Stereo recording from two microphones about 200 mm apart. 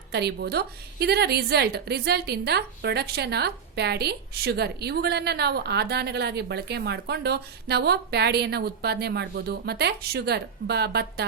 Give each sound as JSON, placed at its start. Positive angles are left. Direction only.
{"t": 0.1, "sound": "a woman's voice", "side_deg": -55}